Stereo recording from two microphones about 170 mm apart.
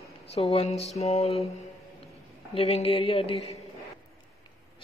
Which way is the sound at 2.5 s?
35° left (ahead or behind).